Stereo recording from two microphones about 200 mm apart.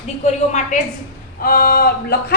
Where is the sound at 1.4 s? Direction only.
45° left (ahead or behind).